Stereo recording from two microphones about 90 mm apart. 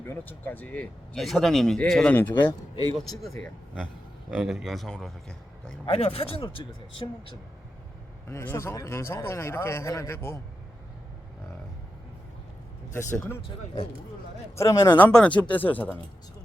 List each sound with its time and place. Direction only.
0.0 s a man's voice: 25° left (ahead or behind)
1.1 s a man's voice: centre (ahead or behind)
2.3 s a man's voice: 55° left (ahead or behind)
3.0 s a man's voice: centre (ahead or behind)
5.8 s speech: 90° left
8.3 s a man's voice: 30° left (ahead or behind)
12.9 s speech: 30° left (ahead or behind)
14.5 s speech: 35° left (ahead or behind)
14.8 s a man's voice: 20° left (ahead or behind)